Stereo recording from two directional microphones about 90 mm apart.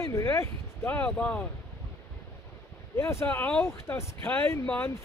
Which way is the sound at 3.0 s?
30° left (ahead or behind).